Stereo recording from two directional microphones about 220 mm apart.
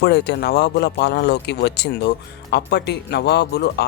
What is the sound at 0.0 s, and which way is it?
Speech, 50° left (ahead or behind).